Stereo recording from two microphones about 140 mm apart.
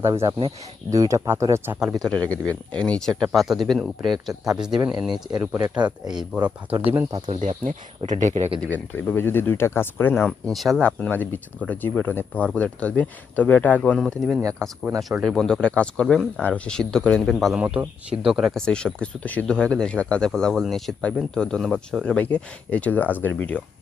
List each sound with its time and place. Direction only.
0.0 s speech: 20° right (ahead or behind)
0.3 s speech: 35° right (ahead or behind)
0.9 s speech: 25° right (ahead or behind)
1.8 s speech: centre (ahead or behind)
7.3 s speech: 55° right (ahead or behind)
8.6 s speech: 15° left (ahead or behind)